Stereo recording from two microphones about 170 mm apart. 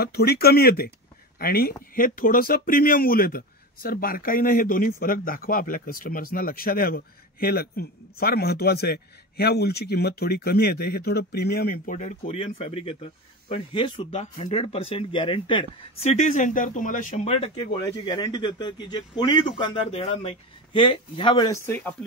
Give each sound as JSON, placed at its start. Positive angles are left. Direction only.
{"t": 0.0, "sound": "speech", "side_deg": 65}
{"t": 21.5, "sound": "speech", "side_deg": 15}